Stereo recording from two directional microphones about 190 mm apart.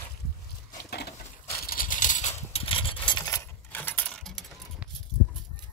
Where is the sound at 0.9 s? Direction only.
60° left (ahead or behind).